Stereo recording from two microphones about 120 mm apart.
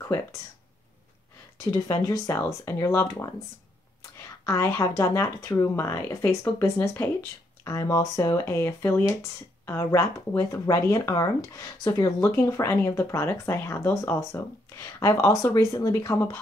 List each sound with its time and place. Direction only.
1.6 s speech: 30° left (ahead or behind)
4.5 s speech: 25° left (ahead or behind)